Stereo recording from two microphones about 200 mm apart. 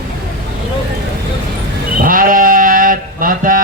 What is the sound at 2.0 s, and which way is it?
Sheep, 45° right (ahead or behind).